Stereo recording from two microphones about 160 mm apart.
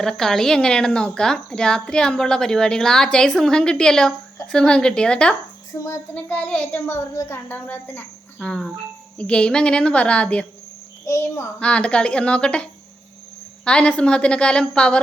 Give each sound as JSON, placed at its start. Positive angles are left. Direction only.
{"t": 0.0, "sound": "speech", "side_deg": 5}
{"t": 5.8, "sound": "a child's voice", "side_deg": 15}
{"t": 11.0, "sound": "a child's voice", "side_deg": 20}
{"t": 11.6, "sound": "a child's voice", "side_deg": 5}
{"t": 13.7, "sound": "speech", "side_deg": 5}